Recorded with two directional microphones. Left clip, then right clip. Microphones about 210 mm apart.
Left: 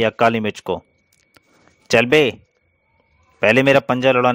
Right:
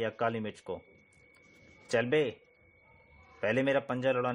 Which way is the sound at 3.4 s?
35° left (ahead or behind).